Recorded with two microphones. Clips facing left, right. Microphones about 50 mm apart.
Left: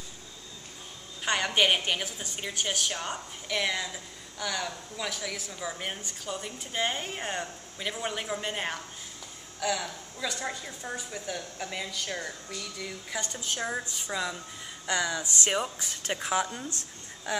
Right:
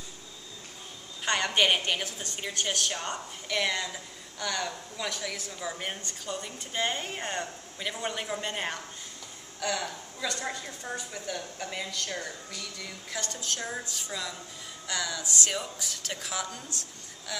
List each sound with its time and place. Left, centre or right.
1.2 s a woman's voice: centre; by 17.4 s left